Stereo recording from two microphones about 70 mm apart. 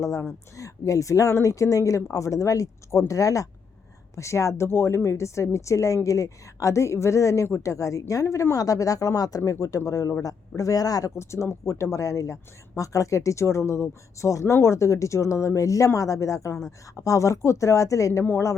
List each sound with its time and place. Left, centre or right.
0.0 s speech: left
9.4 s speech: left
11.2 s speech: left